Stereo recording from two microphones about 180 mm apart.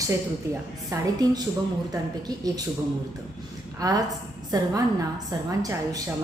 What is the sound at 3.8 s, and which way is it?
Speech, 20° right (ahead or behind).